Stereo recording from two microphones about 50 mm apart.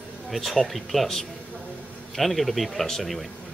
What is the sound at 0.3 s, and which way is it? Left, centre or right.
Speech, centre.